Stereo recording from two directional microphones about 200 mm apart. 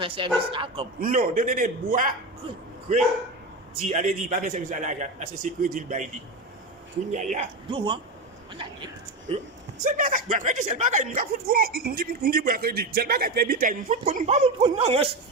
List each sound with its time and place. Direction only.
0.0 s speech: 25° right (ahead or behind)
0.9 s a man's voice: 45° right (ahead or behind)
3.8 s speech: 35° right (ahead or behind)
7.1 s speech: 40° right (ahead or behind)
7.7 s speech: 25° right (ahead or behind)
9.8 s speech: 40° right (ahead or behind)